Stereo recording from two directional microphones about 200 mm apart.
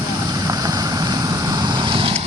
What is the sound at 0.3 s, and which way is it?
Vehicle, 20° right (ahead or behind).